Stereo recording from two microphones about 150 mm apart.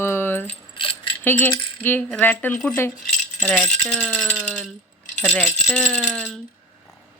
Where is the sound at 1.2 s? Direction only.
15° left (ahead or behind).